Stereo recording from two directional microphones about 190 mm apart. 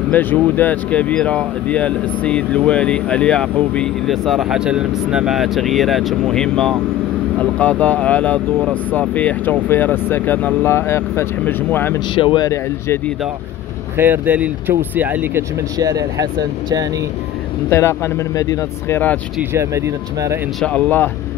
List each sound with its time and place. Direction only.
0.1 s speech: 10° left (ahead or behind)
12.2 s speech: 25° left (ahead or behind)
13.9 s speech: 10° right (ahead or behind)
17.6 s speech: 15° left (ahead or behind)
19.5 s speech: 15° right (ahead or behind)
20.6 s speech: 5° left (ahead or behind)